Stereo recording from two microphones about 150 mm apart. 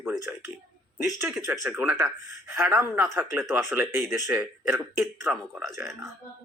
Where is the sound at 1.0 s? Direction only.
Centre (ahead or behind).